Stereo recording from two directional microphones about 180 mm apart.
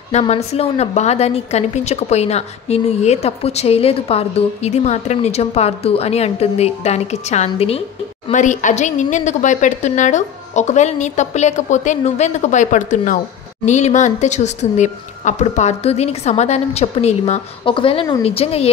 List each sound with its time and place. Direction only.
0.1 s a woman's voice: 35° left (ahead or behind)